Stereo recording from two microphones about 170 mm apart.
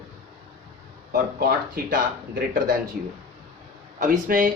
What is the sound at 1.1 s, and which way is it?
Speech, 65° right (ahead or behind).